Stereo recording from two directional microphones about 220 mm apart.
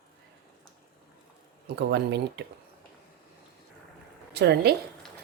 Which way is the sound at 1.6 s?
50° right (ahead or behind).